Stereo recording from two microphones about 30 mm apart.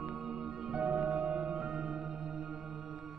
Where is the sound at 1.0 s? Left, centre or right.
Right.